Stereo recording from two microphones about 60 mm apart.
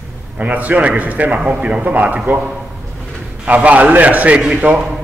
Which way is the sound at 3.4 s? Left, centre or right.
Right.